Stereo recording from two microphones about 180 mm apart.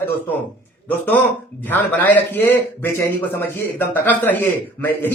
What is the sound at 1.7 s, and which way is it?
A man's voice, 10° left (ahead or behind).